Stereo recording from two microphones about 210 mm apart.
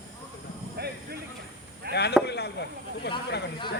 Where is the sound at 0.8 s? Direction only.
50° right (ahead or behind).